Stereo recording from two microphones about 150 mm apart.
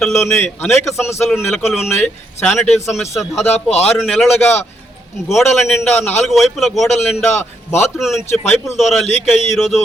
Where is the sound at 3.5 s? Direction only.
45° left (ahead or behind).